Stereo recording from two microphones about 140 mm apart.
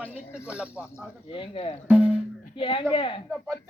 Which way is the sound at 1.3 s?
40° left (ahead or behind).